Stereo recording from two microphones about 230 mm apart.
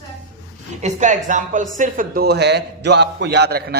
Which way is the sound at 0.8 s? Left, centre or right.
Right.